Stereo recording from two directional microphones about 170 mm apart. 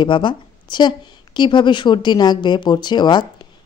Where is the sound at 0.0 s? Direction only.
30° left (ahead or behind).